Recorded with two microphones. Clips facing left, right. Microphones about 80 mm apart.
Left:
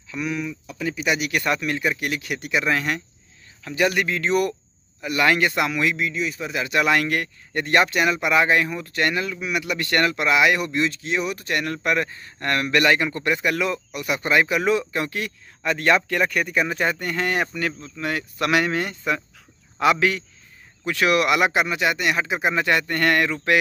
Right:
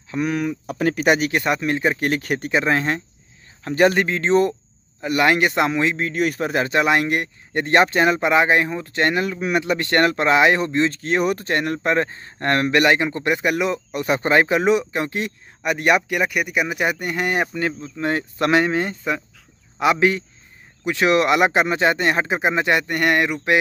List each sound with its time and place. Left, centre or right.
0.1 s speech: right
1.3 s speech: right
6.1 s speech: right
6.7 s speech: right
13.9 s speech: right